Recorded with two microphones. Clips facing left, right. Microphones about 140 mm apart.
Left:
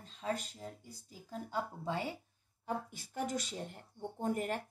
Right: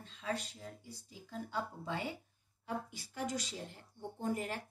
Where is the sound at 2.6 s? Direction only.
50° left (ahead or behind).